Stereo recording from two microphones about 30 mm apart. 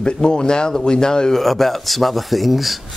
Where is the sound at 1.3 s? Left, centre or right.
Centre.